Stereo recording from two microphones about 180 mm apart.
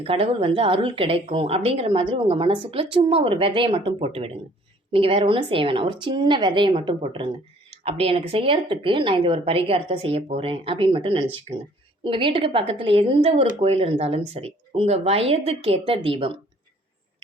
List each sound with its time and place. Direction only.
0.0 s a woman's voice: 35° right (ahead or behind)